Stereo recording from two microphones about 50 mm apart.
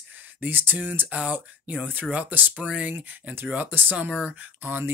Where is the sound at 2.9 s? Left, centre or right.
Right.